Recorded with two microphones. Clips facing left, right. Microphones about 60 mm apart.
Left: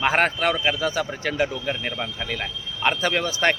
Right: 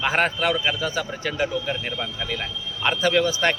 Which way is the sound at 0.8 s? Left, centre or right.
Left.